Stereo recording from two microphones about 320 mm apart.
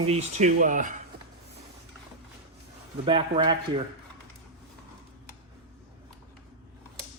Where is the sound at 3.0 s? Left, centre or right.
Centre.